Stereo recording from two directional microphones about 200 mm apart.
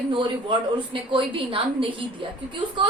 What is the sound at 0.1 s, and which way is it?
A woman's voice, 25° right (ahead or behind).